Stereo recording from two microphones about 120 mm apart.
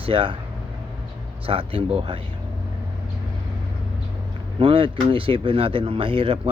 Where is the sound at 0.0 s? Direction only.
50° right (ahead or behind).